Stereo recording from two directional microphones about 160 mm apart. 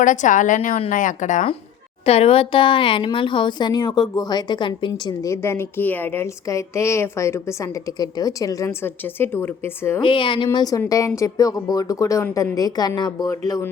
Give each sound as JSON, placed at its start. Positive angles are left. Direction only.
{"t": 0.0, "sound": "a woman's voice", "side_deg": 50}
{"t": 2.0, "sound": "a woman's voice", "side_deg": 40}
{"t": 10.0, "sound": "speech", "side_deg": 30}